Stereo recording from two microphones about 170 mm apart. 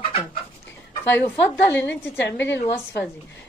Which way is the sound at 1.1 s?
10° left (ahead or behind).